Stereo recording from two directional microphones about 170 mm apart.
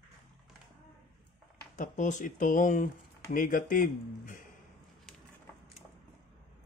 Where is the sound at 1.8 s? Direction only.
45° left (ahead or behind).